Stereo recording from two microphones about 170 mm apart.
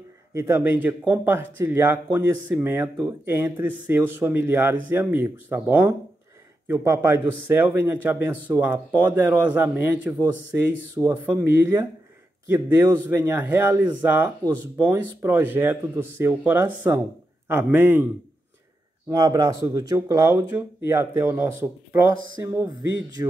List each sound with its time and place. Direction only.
0.3 s speech: 15° right (ahead or behind)
10.2 s speech: 20° right (ahead or behind)
19.0 s speech: 20° right (ahead or behind)